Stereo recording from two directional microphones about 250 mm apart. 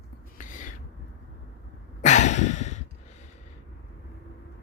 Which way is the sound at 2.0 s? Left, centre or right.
Left.